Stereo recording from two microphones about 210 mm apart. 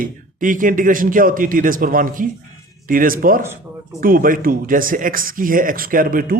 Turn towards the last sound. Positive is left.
turn(degrees=-40)  # may be behind; listen again after turning